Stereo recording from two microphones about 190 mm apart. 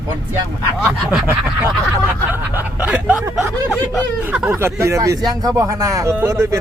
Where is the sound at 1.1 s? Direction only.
5° right (ahead or behind).